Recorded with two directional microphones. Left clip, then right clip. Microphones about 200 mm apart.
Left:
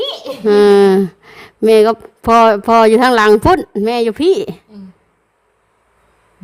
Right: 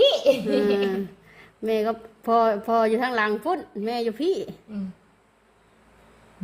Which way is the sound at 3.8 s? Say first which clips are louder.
Left 10 dB; 30° left (ahead or behind).